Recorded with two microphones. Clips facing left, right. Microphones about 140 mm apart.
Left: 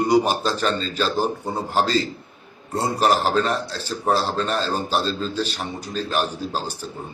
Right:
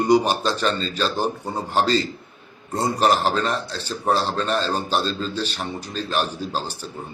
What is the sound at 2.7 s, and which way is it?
A man's voice, 5° left (ahead or behind).